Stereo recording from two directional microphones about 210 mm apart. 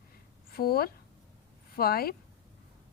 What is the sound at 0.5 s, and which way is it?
A woman's voice, 45° left (ahead or behind).